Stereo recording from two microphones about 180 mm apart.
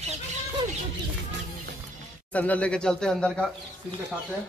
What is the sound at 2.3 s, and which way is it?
Speech, 10° left (ahead or behind).